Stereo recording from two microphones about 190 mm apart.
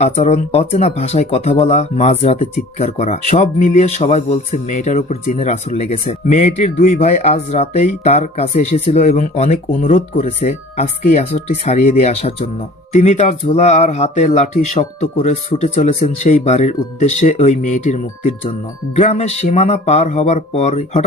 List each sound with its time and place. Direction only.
0.0 s speech: 35° left (ahead or behind)